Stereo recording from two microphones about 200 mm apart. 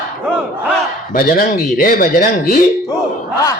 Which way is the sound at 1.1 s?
45° left (ahead or behind).